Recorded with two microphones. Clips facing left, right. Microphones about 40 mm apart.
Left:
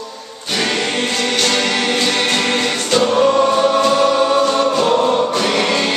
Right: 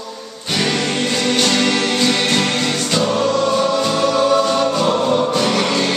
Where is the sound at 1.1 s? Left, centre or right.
Centre.